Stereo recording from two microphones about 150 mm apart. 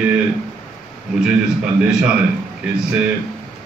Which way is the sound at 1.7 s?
5° right (ahead or behind).